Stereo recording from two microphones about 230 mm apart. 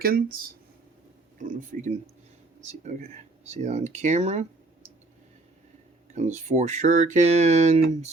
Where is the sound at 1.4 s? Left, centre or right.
Right.